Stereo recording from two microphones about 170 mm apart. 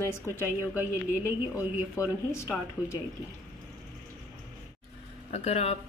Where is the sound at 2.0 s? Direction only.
15° left (ahead or behind).